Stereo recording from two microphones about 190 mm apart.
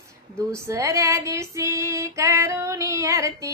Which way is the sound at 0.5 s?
15° right (ahead or behind).